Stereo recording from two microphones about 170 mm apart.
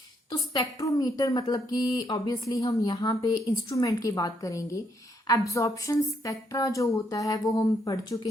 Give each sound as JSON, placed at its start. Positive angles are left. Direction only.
{"t": 0.3, "sound": "a woman's voice", "side_deg": 25}